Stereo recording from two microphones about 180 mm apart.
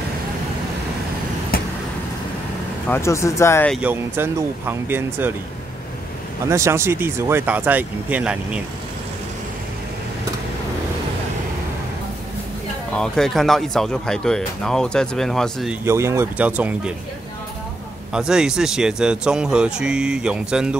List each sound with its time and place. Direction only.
2.9 s speech: 15° left (ahead or behind)
3.7 s speech: 10° right (ahead or behind)
6.5 s speech: 15° right (ahead or behind)
12.9 s speech: 5° left (ahead or behind)
15.8 s speech: 15° right (ahead or behind)
18.1 s speech: 5° right (ahead or behind)